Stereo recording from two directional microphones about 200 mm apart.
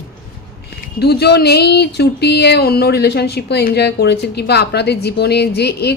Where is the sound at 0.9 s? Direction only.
55° left (ahead or behind).